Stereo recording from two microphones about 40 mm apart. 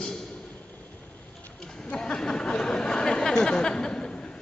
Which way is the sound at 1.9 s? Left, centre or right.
Centre.